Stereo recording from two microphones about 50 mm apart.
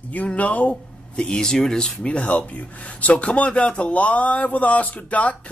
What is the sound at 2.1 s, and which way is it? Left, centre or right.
Speech, left.